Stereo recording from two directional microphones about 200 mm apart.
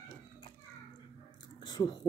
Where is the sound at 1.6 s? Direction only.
20° left (ahead or behind).